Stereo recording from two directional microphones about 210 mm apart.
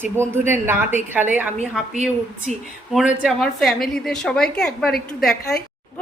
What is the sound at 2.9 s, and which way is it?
A woman's voice, 5° right (ahead or behind).